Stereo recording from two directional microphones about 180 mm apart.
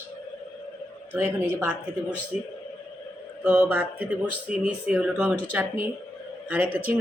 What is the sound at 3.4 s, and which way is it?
Speech, 10° right (ahead or behind).